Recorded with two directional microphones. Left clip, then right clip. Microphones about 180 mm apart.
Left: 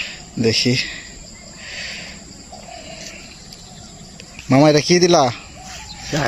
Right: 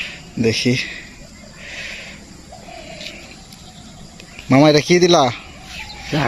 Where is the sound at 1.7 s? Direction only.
Centre (ahead or behind).